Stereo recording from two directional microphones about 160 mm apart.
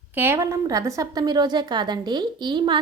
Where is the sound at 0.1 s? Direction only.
15° right (ahead or behind).